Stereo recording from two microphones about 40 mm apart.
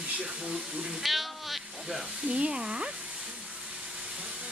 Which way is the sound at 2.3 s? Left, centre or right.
Right.